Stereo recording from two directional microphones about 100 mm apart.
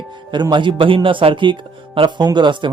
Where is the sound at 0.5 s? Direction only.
50° right (ahead or behind).